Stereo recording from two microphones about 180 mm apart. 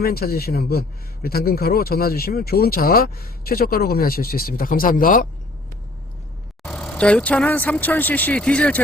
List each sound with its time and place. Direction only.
0.0 s a man's voice: 60° left (ahead or behind)
6.7 s speech: 5° left (ahead or behind)